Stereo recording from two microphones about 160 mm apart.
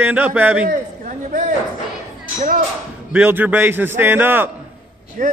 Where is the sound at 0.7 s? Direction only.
55° right (ahead or behind).